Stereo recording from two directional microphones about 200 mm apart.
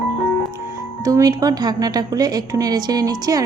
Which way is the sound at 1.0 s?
15° right (ahead or behind).